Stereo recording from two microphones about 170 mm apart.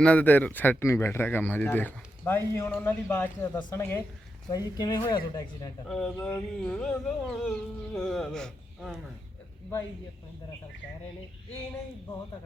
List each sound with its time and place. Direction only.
0.0 s speech: 10° left (ahead or behind)
4.4 s speech: 25° left (ahead or behind)
5.9 s speech: 5° left (ahead or behind)